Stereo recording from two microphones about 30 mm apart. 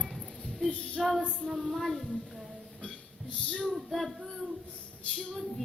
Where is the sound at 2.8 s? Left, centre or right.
Left.